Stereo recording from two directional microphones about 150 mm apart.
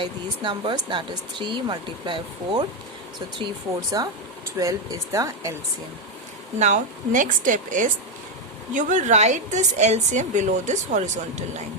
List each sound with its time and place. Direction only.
0.0 s speech: 35° right (ahead or behind)
6.6 s a woman's voice: 55° right (ahead or behind)